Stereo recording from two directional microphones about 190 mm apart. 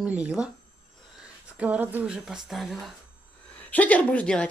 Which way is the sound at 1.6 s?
10° right (ahead or behind).